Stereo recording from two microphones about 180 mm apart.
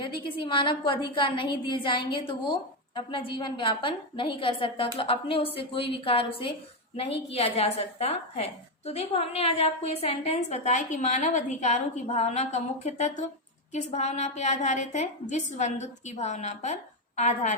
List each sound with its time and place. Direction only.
0.2 s a woman's voice: 30° left (ahead or behind)